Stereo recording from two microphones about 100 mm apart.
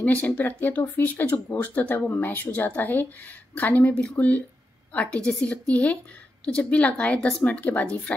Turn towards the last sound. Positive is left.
turn(degrees=15)  # may be behind; listen again after turning